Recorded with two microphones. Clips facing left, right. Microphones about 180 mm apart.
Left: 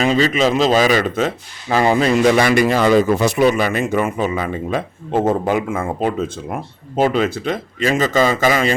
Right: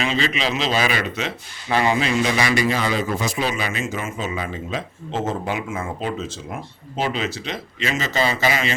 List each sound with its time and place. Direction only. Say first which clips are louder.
0.0 s speech: left 8 dB; 40° left (ahead or behind)